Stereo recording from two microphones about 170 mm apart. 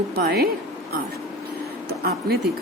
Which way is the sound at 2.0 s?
65° right (ahead or behind).